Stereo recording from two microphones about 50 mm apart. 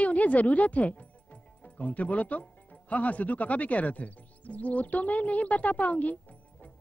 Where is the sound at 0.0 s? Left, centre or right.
Left.